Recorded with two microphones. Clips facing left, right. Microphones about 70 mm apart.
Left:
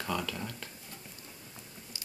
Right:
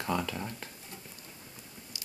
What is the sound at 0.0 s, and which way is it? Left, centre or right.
Speech, centre.